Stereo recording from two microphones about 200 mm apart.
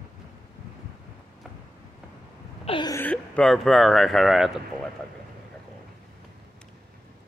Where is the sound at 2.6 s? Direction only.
25° left (ahead or behind).